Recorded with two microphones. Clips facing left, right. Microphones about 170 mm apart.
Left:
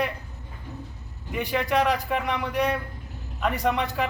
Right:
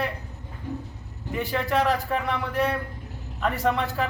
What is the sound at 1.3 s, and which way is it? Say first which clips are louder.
Speech: even; 15° left (ahead or behind).